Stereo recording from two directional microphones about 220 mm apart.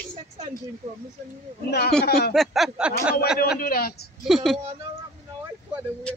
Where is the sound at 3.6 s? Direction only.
45° left (ahead or behind).